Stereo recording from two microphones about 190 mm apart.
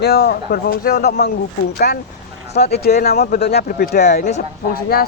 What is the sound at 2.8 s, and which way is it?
Speech, 55° left (ahead or behind).